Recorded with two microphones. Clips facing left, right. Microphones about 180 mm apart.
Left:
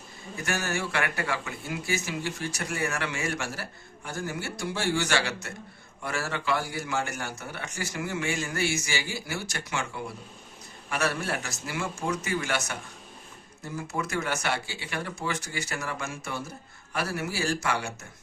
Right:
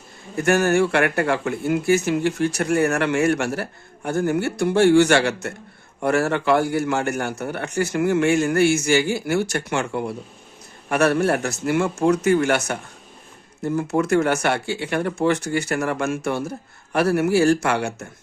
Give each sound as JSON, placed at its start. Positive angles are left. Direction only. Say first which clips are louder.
{"t": 0.3, "sound": "speech", "louder": "right 13 dB", "side_deg": -60}